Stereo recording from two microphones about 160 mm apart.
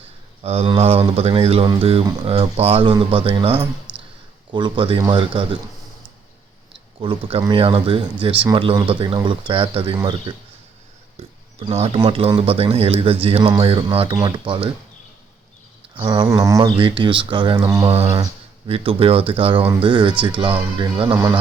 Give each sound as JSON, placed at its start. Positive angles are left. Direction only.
{"t": 0.4, "sound": "speech", "side_deg": -40}
{"t": 3.6, "sound": "a sound", "side_deg": -10}
{"t": 4.5, "sound": "speech", "side_deg": -30}
{"t": 7.0, "sound": "speech", "side_deg": -35}
{"t": 11.2, "sound": "a sound", "side_deg": -40}
{"t": 11.6, "sound": "speech", "side_deg": -35}
{"t": 16.0, "sound": "speech", "side_deg": -30}
{"t": 16.3, "sound": "speech", "side_deg": -20}
{"t": 16.7, "sound": "speech", "side_deg": -30}
{"t": 17.8, "sound": "speech", "side_deg": -35}